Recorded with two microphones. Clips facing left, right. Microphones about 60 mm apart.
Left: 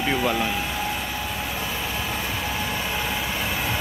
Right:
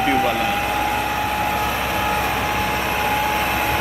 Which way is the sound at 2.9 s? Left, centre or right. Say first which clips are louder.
Right 7 dB; right.